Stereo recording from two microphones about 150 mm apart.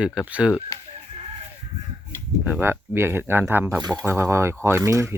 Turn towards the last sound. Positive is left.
turn(degrees=-20)  # may be behind; listen again after turning